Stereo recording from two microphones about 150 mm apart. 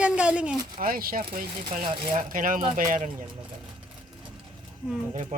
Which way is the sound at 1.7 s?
35° right (ahead or behind).